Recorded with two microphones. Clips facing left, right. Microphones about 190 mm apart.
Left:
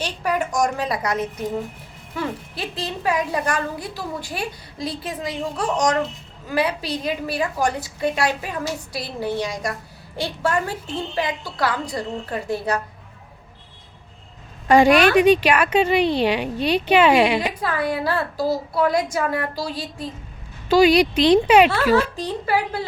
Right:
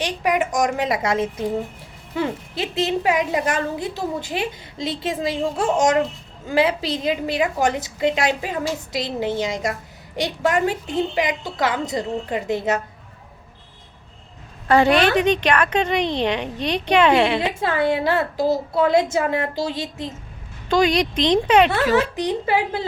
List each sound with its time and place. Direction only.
0.0 s a woman's voice: 15° right (ahead or behind)
14.7 s a woman's voice: 15° left (ahead or behind)
17.4 s a woman's voice: 25° right (ahead or behind)
20.7 s a woman's voice: 5° left (ahead or behind)
21.9 s a woman's voice: 15° right (ahead or behind)